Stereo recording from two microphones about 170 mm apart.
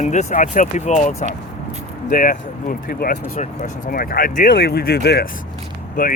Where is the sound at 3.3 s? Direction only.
45° left (ahead or behind).